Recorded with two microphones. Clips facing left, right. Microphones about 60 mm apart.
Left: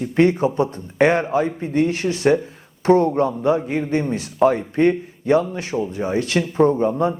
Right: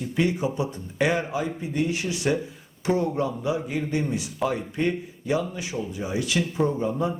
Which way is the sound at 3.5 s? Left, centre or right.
Left.